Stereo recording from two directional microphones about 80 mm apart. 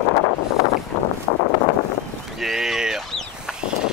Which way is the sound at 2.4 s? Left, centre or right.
Centre.